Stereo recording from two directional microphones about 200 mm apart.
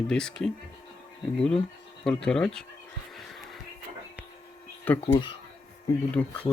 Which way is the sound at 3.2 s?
Centre (ahead or behind).